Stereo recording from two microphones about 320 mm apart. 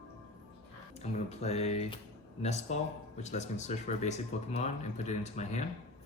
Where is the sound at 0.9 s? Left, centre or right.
Centre.